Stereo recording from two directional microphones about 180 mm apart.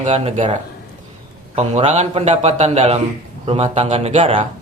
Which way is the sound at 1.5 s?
35° right (ahead or behind).